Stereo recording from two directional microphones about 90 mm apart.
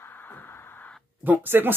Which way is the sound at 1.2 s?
20° right (ahead or behind).